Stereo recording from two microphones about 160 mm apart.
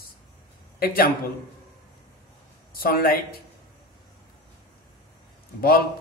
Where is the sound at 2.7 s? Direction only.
70° left (ahead or behind).